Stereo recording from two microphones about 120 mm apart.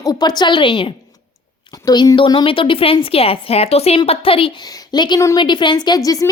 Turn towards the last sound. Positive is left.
turn(degrees=30)  # may be behind; listen again after turning